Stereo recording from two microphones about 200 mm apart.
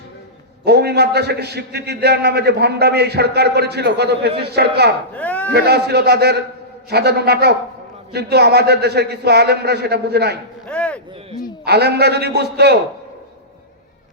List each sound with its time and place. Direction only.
0.6 s a man's voice: 55° right (ahead or behind)
5.1 s speech: 5° left (ahead or behind)
5.5 s a man's voice: 55° right (ahead or behind)
10.7 s a sound: 5° left (ahead or behind)
11.6 s a man's voice: 55° right (ahead or behind)